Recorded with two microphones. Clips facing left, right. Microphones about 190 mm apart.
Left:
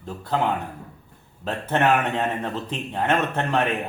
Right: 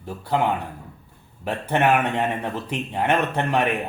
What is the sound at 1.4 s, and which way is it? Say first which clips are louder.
A man's voice: right 1 dB; 10° right (ahead or behind).